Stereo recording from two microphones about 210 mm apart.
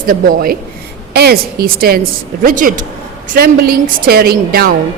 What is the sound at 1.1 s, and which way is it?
A woman's voice, 50° right (ahead or behind).